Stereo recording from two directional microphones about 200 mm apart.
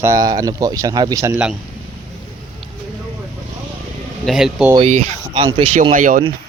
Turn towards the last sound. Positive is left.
turn(degrees=-40)  # may be behind; listen again after turning